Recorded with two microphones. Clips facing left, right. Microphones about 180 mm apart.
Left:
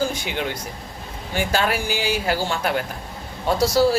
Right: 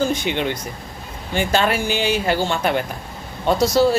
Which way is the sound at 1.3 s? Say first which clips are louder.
Right 3 dB; 10° left (ahead or behind).